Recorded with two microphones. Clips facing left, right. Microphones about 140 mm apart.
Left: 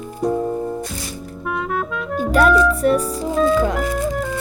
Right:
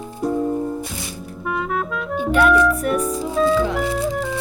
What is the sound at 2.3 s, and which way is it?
Music, 35° left (ahead or behind).